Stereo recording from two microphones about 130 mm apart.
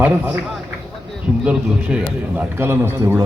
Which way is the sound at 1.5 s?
10° right (ahead or behind).